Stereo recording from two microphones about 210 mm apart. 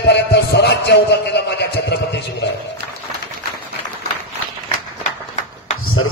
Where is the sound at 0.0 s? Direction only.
55° left (ahead or behind).